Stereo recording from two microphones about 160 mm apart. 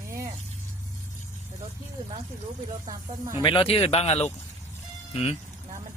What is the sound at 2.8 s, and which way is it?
Speech, 20° right (ahead or behind).